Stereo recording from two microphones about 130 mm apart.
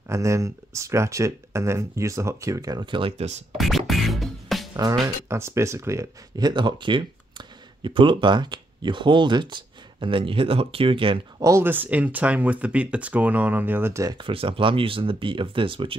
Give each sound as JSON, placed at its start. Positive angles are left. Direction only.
{"t": 0.1, "sound": "speech", "side_deg": -25}
{"t": 3.5, "sound": "music", "side_deg": 0}
{"t": 5.0, "sound": "speech", "side_deg": -20}
{"t": 11.4, "sound": "speech", "side_deg": -20}
{"t": 14.1, "sound": "speech", "side_deg": -45}